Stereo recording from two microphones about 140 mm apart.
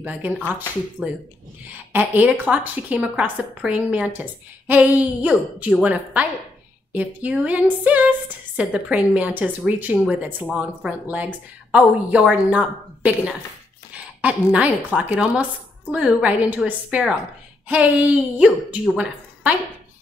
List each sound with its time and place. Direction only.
0.0 s a woman's voice: 10° right (ahead or behind)